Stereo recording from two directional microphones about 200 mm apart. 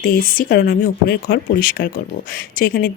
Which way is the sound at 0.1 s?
45° left (ahead or behind).